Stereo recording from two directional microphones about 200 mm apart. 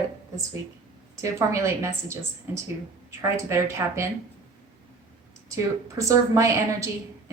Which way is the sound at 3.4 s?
15° right (ahead or behind).